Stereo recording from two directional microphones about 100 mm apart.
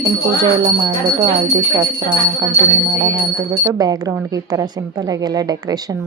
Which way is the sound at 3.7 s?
40° right (ahead or behind).